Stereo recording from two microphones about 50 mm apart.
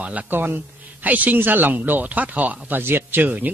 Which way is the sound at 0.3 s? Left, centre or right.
Right.